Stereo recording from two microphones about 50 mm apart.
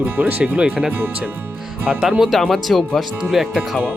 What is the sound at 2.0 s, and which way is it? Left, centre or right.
Speech, centre.